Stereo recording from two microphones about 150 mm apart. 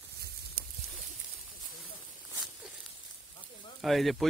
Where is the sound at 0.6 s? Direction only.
70° right (ahead or behind).